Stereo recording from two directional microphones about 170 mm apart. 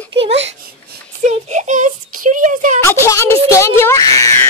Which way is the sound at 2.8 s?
15° left (ahead or behind).